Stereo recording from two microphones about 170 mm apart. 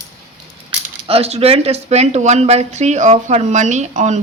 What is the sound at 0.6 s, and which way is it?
Speech, 35° right (ahead or behind).